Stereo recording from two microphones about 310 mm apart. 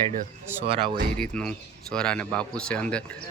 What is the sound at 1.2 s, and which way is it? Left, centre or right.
Speech, centre.